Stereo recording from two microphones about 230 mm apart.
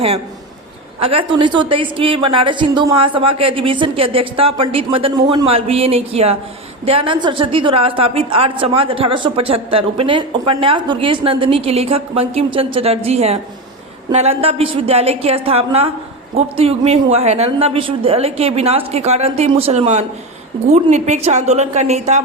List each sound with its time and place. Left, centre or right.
0.9 s a woman's voice: right